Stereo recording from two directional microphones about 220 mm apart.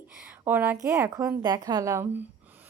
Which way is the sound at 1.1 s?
15° right (ahead or behind).